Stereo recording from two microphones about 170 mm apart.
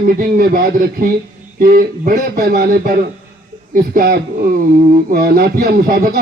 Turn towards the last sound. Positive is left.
turn(degrees=-60)  # may be behind; listen again after turning